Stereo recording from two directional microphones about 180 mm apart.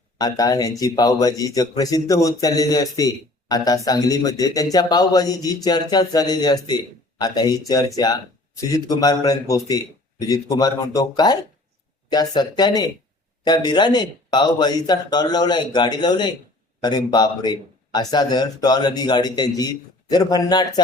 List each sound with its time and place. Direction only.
0.2 s speech: 20° left (ahead or behind)